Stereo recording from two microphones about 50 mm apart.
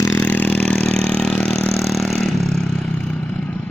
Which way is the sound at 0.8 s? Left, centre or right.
Centre.